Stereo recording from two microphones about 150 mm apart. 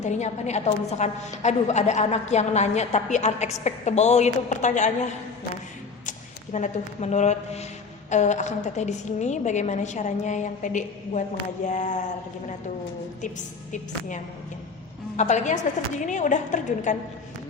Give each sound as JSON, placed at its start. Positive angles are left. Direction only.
{"t": 0.0, "sound": "a woman's voice", "side_deg": 50}
{"t": 6.1, "sound": "a woman's voice", "side_deg": 55}
{"t": 15.1, "sound": "a woman's voice", "side_deg": 50}